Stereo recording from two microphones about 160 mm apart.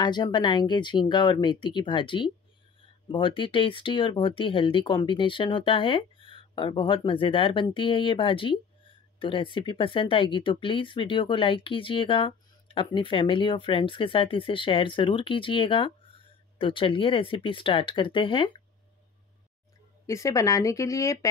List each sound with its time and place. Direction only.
0.0 s speech: 25° left (ahead or behind)
20.1 s speech: 20° left (ahead or behind)